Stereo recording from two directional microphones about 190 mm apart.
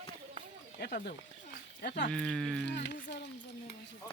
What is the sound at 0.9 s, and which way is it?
Speech, 50° left (ahead or behind).